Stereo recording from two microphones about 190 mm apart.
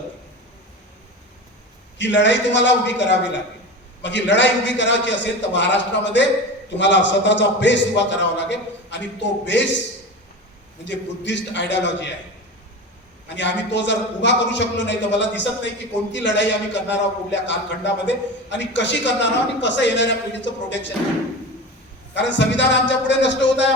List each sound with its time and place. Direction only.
2.0 s a man's voice: 70° left (ahead or behind)
10.8 s a man's voice: 70° left (ahead or behind)
13.2 s a man's voice: 70° left (ahead or behind)
22.1 s a man's voice: 70° left (ahead or behind)